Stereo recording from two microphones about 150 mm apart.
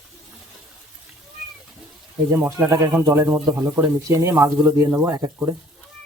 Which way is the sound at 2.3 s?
20° right (ahead or behind).